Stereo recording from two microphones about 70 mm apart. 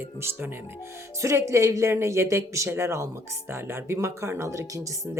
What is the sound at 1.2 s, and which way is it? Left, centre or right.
Speech, right.